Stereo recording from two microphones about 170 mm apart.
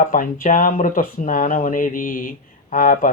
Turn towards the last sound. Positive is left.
turn(degrees=50)  # may be behind; listen again after turning